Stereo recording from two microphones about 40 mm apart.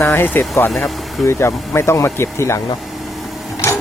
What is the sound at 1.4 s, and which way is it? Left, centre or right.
Speech, left.